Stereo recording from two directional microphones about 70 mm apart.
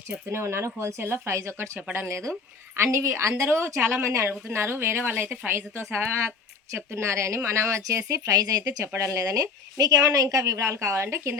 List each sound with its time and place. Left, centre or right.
0.1 s speech: right
9.0 s speech: right